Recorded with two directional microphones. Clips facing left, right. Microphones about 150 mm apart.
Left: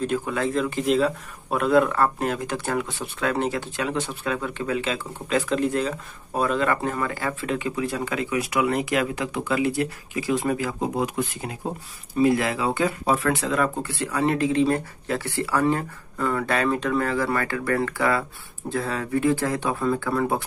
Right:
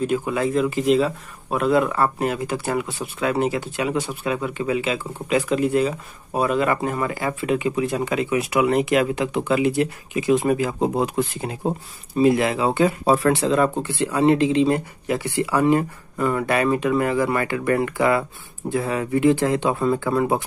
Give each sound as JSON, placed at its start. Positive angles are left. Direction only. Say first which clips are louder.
{"t": 0.0, "sound": "speech", "louder": "right 3 dB", "side_deg": -10}